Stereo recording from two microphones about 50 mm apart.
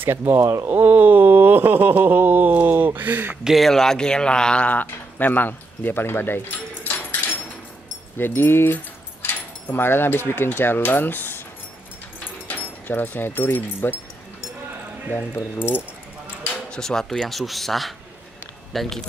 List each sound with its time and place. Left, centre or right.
0.0 s speech: right
0.7 s a sound: right
3.6 s a man's voice: centre
4.6 s speech: left
8.2 s speech: left
12.4 s speech: left
15.3 s speech: left
16.7 s speech: centre